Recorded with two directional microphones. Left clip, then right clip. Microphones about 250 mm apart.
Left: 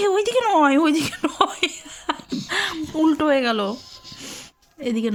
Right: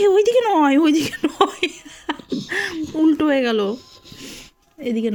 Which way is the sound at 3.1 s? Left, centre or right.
Centre.